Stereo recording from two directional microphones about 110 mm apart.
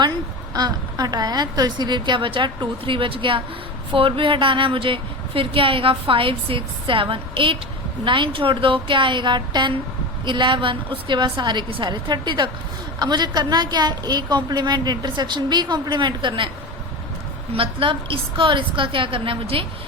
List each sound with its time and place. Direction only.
0.5 s a woman's voice: 35° right (ahead or behind)
17.5 s a woman's voice: 55° right (ahead or behind)